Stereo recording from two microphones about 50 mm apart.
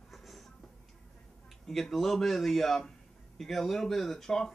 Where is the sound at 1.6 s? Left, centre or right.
Centre.